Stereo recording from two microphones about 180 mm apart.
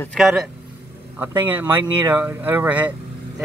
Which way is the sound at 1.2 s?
15° right (ahead or behind).